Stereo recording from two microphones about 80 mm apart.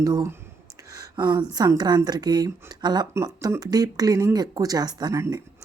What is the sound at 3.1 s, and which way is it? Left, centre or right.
A woman's voice, right.